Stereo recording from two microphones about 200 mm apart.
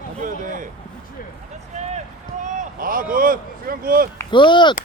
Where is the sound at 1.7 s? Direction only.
35° right (ahead or behind).